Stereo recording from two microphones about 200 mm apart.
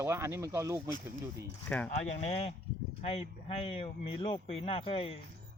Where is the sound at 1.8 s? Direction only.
35° left (ahead or behind).